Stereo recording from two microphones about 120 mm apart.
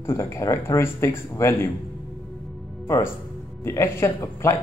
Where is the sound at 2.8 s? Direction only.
20° left (ahead or behind).